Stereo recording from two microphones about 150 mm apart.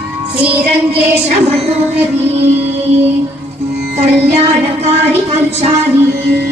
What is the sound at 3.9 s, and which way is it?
Music, 45° right (ahead or behind).